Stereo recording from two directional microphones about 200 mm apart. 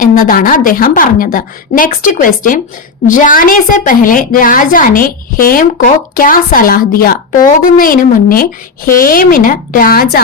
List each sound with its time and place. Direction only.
0.0 s a woman's voice: 45° left (ahead or behind)